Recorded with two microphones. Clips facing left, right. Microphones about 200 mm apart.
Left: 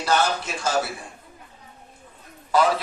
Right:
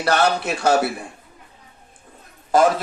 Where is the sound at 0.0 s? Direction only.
65° right (ahead or behind).